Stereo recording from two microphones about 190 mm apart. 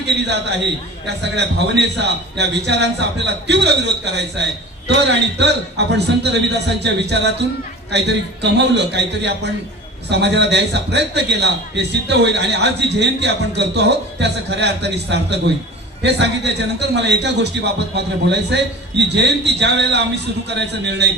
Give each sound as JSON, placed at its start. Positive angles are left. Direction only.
{"t": 1.0, "sound": "a man's voice", "side_deg": -65}